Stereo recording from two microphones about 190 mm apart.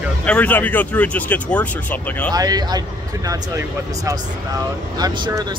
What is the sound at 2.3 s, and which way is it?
Speech, 20° right (ahead or behind).